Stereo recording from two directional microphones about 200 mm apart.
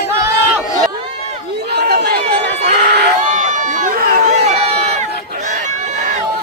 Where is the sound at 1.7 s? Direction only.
55° right (ahead or behind).